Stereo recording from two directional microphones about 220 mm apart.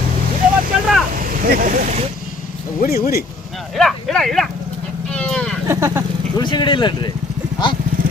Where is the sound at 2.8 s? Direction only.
45° left (ahead or behind).